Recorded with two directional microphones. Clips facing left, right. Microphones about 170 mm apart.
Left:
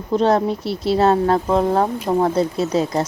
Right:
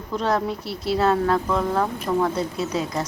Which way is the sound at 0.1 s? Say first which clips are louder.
Left 7 dB; 25° left (ahead or behind).